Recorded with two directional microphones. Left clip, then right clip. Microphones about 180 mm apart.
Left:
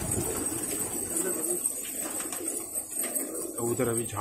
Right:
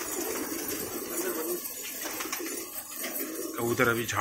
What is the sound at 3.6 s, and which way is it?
Speech, 10° left (ahead or behind).